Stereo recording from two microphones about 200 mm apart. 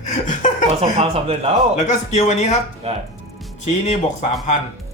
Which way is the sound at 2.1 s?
35° left (ahead or behind).